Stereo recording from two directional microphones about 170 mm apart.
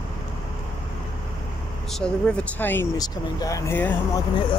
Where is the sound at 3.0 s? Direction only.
20° left (ahead or behind).